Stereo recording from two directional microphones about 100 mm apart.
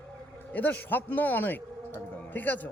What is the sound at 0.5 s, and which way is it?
Speech, 20° left (ahead or behind).